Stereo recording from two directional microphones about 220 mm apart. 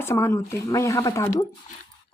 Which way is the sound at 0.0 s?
10° left (ahead or behind).